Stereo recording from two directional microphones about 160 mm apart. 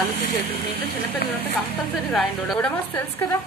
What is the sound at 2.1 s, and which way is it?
Speech, 5° left (ahead or behind).